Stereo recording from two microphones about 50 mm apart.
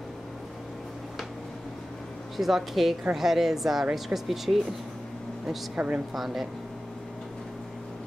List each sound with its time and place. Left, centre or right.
2.3 s speech: centre
5.8 s a woman's voice: right
6.1 s speech: centre